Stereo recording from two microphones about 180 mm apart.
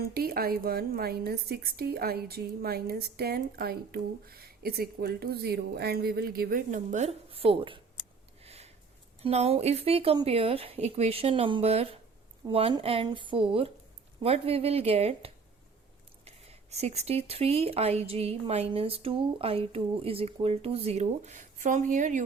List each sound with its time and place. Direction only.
0.1 s a woman's voice: 55° right (ahead or behind); by 7.8 s 30° right (ahead or behind)
8.4 s a sound: 35° right (ahead or behind)
9.2 s speech: 35° right (ahead or behind)